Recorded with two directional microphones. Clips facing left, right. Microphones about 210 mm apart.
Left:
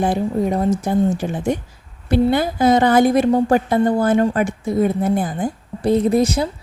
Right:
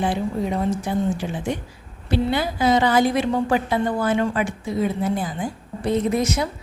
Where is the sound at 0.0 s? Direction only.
45° left (ahead or behind).